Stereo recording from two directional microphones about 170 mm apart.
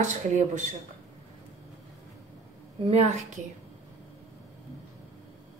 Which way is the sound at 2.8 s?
40° right (ahead or behind).